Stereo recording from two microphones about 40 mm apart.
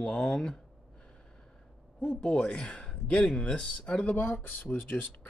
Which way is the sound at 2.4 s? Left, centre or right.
Left.